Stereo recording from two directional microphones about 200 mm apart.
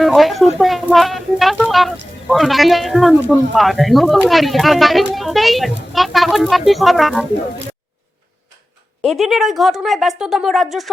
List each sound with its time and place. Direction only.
0.0 s speech: centre (ahead or behind)
9.0 s speech: centre (ahead or behind)